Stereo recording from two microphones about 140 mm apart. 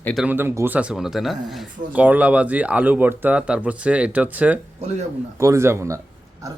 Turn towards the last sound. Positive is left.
turn(degrees=-20)  # may be behind; listen again after turning